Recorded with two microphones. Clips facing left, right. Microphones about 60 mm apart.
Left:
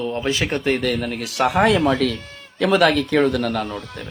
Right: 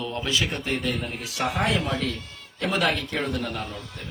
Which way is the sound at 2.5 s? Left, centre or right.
Left.